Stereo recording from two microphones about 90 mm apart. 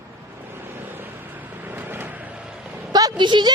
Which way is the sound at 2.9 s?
50° right (ahead or behind).